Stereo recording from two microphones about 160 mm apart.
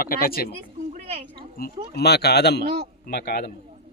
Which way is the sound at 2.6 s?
75° right (ahead or behind).